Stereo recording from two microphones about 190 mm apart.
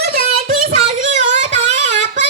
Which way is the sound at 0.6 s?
35° right (ahead or behind).